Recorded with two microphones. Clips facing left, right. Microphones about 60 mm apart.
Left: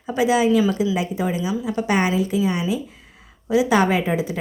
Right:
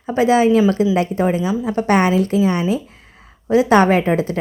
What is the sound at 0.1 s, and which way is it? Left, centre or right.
A woman's voice, right.